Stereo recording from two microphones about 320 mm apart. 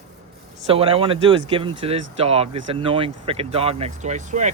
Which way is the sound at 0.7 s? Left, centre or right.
Centre.